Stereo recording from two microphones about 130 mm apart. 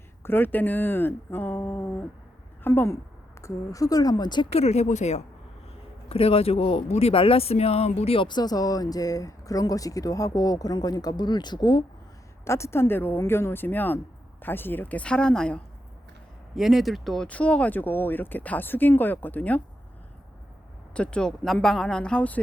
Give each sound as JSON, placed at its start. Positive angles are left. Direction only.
{"t": 0.2, "sound": "a woman's voice", "side_deg": 15}
{"t": 4.5, "sound": "speech", "side_deg": 55}
{"t": 6.1, "sound": "speech", "side_deg": 50}
{"t": 12.5, "sound": "speech", "side_deg": 20}
{"t": 20.9, "sound": "speech", "side_deg": 10}